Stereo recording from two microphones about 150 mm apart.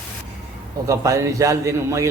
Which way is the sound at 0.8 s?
20° right (ahead or behind).